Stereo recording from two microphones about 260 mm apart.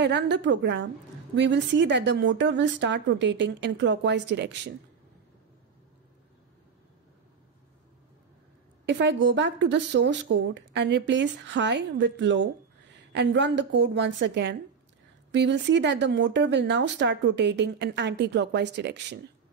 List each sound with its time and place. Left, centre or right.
0.0 s a woman's voice: right
8.8 s a woman's voice: right